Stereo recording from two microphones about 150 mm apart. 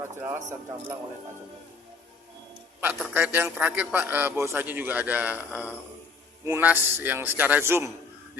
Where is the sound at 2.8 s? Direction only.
10° right (ahead or behind).